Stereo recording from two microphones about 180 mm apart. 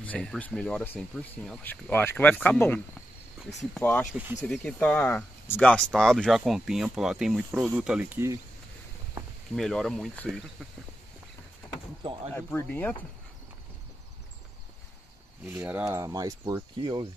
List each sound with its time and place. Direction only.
0.0 s speech: 5° left (ahead or behind)
4.5 s speech: 5° left (ahead or behind); by 8.4 s 10° right (ahead or behind)
9.6 s speech: centre (ahead or behind)
12.0 s speech: 30° right (ahead or behind)
12.4 s speech: 10° left (ahead or behind)
15.4 s speech: 10° right (ahead or behind); by 17.1 s 25° right (ahead or behind)